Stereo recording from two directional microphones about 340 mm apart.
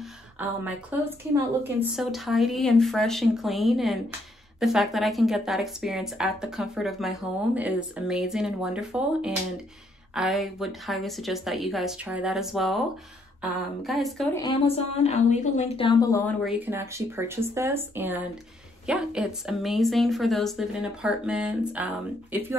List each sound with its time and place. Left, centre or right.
0.4 s speech: centre
14.4 s a woman's voice: centre
16.4 s speech: centre